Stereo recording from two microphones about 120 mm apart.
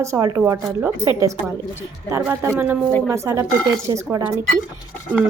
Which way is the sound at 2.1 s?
20° right (ahead or behind).